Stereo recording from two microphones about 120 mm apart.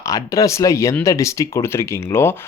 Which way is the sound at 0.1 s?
25° left (ahead or behind).